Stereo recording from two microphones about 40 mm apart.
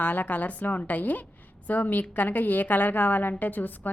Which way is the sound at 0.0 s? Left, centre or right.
Left.